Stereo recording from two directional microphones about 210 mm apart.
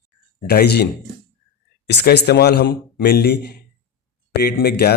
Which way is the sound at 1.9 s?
55° left (ahead or behind).